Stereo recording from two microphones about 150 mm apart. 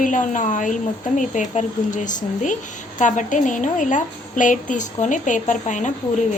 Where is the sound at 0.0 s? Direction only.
60° left (ahead or behind).